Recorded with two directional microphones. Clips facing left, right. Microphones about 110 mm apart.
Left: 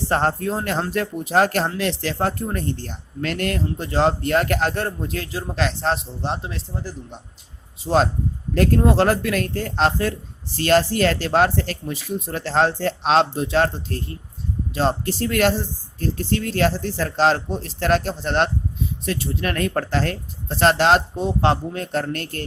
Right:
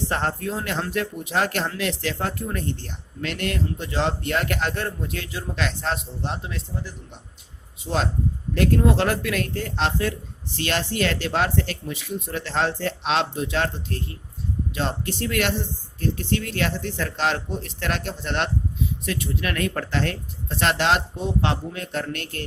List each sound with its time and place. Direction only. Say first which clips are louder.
0.1 s speech: left 5 dB; 40° left (ahead or behind)
8.5 s speech: left 3 dB; 40° left (ahead or behind)